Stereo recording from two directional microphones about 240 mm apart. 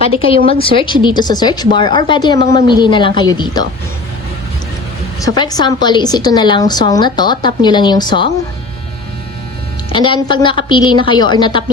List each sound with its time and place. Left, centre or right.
0.1 s a woman's voice: left
5.2 s a woman's voice: centre
9.9 s a woman's voice: centre